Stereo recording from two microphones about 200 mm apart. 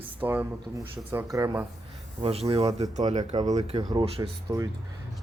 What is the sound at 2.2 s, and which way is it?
Speech, 30° right (ahead or behind).